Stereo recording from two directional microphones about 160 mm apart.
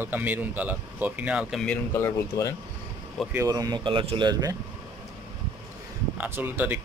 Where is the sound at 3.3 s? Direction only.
20° right (ahead or behind).